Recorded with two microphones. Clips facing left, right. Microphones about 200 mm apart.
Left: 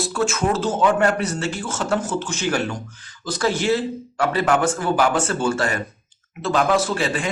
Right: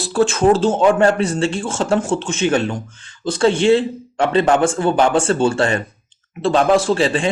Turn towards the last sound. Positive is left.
turn(degrees=-30)  # may be behind; listen again after turning